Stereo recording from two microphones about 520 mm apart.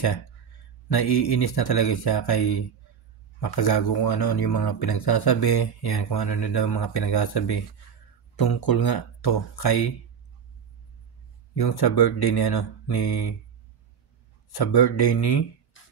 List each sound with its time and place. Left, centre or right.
0.8 s speech: left
11.5 s speech: left
14.5 s speech: left
15.8 s music: left